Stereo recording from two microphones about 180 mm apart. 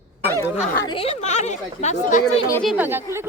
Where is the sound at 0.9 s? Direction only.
30° left (ahead or behind).